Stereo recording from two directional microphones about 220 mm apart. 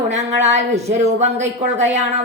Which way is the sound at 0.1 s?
30° right (ahead or behind).